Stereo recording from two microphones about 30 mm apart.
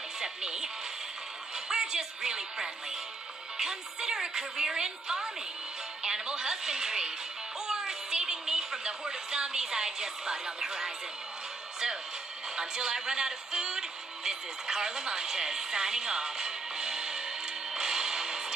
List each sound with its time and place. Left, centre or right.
0.2 s speech: right
1.7 s a woman's voice: right
7.6 s music: right
12.5 s speech: right
17.7 s music: right